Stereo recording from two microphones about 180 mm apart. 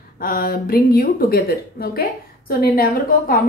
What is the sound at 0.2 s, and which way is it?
A woman's voice, 55° left (ahead or behind).